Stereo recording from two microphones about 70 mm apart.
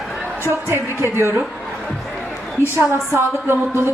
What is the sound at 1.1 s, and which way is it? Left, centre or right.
Speech, right.